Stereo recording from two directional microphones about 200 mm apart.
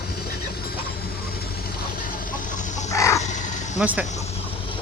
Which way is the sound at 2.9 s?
15° left (ahead or behind).